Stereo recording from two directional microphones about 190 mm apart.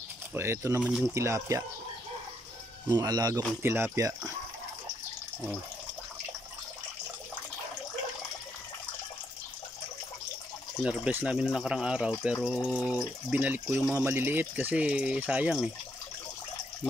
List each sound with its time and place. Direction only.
0.3 s speech: 15° right (ahead or behind)
2.9 s speech: 20° right (ahead or behind)
10.8 s speech: 5° right (ahead or behind)